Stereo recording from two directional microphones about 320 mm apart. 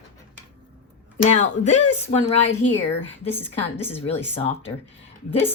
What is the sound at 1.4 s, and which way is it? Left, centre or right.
A woman's voice, left.